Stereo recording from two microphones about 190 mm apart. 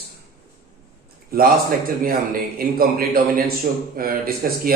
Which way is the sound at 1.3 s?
50° right (ahead or behind).